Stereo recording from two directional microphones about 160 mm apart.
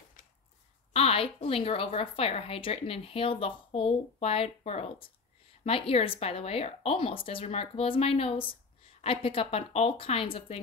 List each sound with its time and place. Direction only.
0.9 s a woman's voice: 35° left (ahead or behind)